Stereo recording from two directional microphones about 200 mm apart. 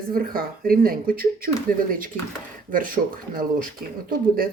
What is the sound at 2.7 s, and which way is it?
Speech, 45° right (ahead or behind).